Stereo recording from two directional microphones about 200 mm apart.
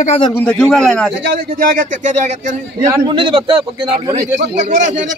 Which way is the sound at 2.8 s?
20° right (ahead or behind).